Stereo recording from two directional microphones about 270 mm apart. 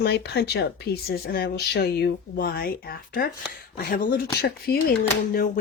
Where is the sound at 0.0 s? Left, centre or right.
Left.